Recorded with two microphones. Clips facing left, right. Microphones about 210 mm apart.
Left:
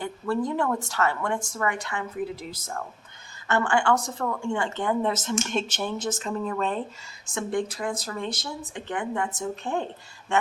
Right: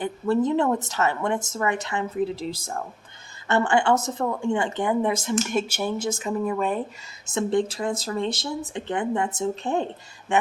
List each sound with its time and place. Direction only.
0.0 s a woman's voice: 20° right (ahead or behind)
7.3 s a woman's voice: 25° right (ahead or behind)